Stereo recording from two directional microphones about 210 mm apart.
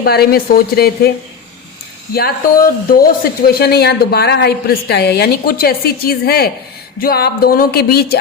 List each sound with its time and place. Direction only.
0.0 s a woman's voice: 50° left (ahead or behind)
2.1 s a woman's voice: 45° left (ahead or behind)